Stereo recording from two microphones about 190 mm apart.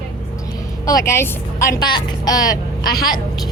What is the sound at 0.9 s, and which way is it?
A woman's voice, 15° left (ahead or behind).